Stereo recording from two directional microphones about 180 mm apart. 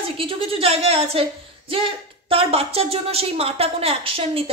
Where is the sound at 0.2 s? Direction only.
30° right (ahead or behind).